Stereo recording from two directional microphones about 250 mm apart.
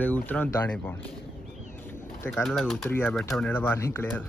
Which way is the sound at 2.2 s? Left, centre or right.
Centre.